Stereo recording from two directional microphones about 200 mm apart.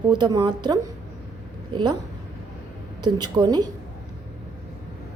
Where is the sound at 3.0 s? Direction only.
20° right (ahead or behind).